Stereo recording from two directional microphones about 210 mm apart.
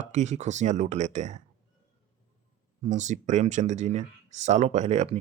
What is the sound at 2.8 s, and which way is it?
A man's voice, 35° right (ahead or behind).